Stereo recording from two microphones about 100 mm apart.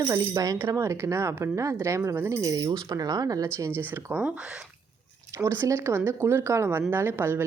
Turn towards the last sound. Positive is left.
turn(degrees=-20)  # may be behind; listen again after turning